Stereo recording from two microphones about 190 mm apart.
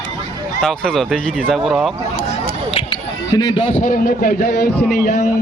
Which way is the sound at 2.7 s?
25° left (ahead or behind).